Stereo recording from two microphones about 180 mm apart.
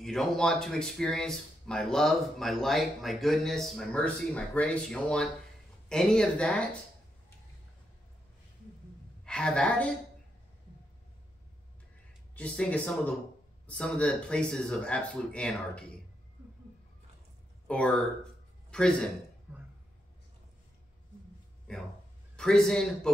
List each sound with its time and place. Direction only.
0.0 s speech: centre (ahead or behind)
9.2 s a woman's voice: 5° left (ahead or behind)
12.4 s speech: 5° left (ahead or behind)
17.6 s speech: 5° left (ahead or behind)
19.5 s a sound: 10° right (ahead or behind)
22.3 s speech: 5° left (ahead or behind)